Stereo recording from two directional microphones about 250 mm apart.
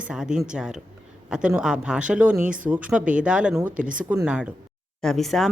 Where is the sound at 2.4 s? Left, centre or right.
Right.